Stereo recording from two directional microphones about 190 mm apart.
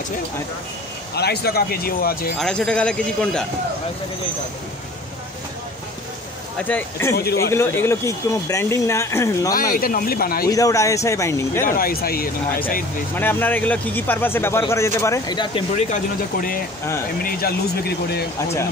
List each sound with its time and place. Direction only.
1.1 s speech: 60° left (ahead or behind)
2.3 s a man's voice: 5° left (ahead or behind)
6.7 s speech: 10° left (ahead or behind)
7.2 s speech: 55° left (ahead or behind)
7.5 s speech: 10° left (ahead or behind)
9.6 s speech: 50° left (ahead or behind)
10.5 s speech: 15° left (ahead or behind)
11.6 s speech: 50° left (ahead or behind)
13.1 s speech: 10° left (ahead or behind)
15.7 s speech: 45° left (ahead or behind)